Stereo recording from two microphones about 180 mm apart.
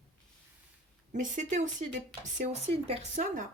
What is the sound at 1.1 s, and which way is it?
Speech, 45° right (ahead or behind).